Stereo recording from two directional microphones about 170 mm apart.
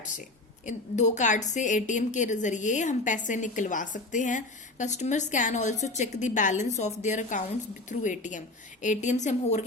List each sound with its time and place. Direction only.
0.0 s a woman's voice: 50° left (ahead or behind)